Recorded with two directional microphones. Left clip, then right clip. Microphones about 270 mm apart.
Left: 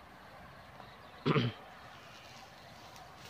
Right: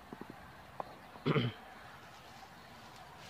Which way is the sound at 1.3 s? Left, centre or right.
Centre.